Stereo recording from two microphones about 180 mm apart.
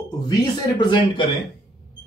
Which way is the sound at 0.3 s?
25° left (ahead or behind).